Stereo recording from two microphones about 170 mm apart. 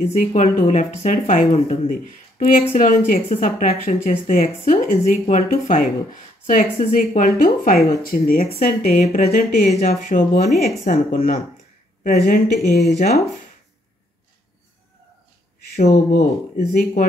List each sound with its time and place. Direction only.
0.0 s speech: 45° left (ahead or behind); by 13.2 s 65° left (ahead or behind)
16.2 s speech: 70° left (ahead or behind)